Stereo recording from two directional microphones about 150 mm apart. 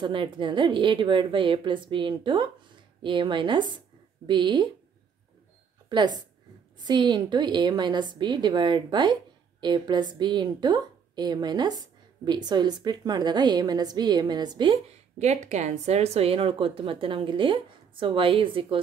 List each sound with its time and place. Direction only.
0.0 s speech: 35° right (ahead or behind)
5.9 s a woman's voice: 30° right (ahead or behind)
15.1 s speech: 50° right (ahead or behind); by 18.8 s 35° right (ahead or behind)